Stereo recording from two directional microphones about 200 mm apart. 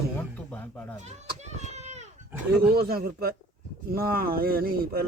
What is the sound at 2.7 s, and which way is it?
Speech, 50° right (ahead or behind).